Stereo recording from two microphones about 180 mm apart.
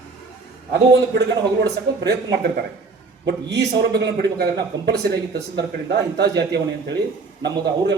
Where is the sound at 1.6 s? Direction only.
65° right (ahead or behind).